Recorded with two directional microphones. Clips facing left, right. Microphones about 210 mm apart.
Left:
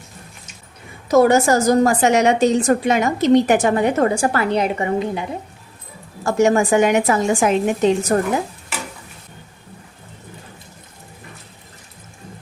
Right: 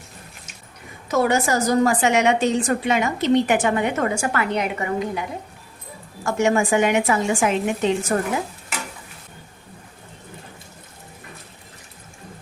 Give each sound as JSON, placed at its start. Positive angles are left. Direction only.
{"t": 1.0, "sound": "a woman's voice", "side_deg": 40}
{"t": 6.2, "sound": "a woman's voice", "side_deg": 40}